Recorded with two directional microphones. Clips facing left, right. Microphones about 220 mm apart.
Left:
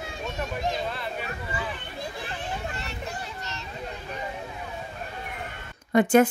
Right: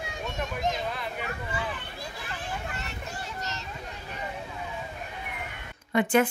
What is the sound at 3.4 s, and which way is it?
Children playing, 40° right (ahead or behind).